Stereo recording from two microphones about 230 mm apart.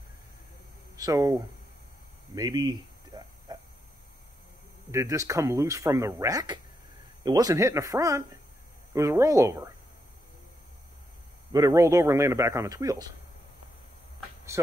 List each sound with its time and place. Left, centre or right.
0.9 s speech: centre
2.3 s a sound: centre
4.9 s speech: centre
11.5 s speech: centre
14.5 s speech: centre